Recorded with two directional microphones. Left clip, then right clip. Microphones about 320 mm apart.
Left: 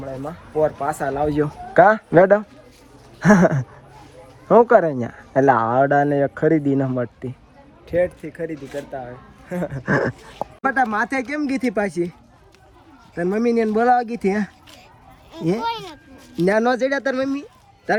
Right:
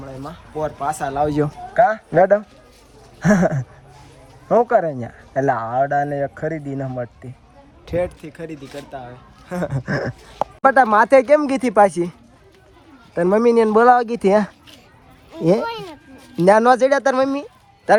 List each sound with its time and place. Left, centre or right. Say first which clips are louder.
0.0 s speech: left 3 dB; centre
1.2 s speech: right 2 dB; right
1.7 s speech: left 3 dB; centre
7.9 s speech: left 2 dB; centre
9.6 s speech: right 2 dB; right
9.8 s speech: left 4 dB; centre
13.1 s speech: right 5 dB; centre
15.3 s speech: right 4 dB; centre
16.3 s speech: right 6 dB; centre